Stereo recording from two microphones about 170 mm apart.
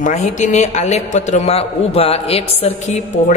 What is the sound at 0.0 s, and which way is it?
A man's voice, 45° left (ahead or behind).